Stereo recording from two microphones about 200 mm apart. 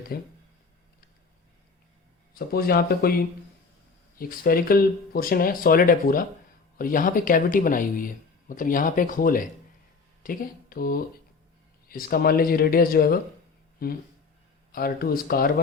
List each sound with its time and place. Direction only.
0.1 s speech: 50° left (ahead or behind)
2.3 s speech: 50° left (ahead or behind)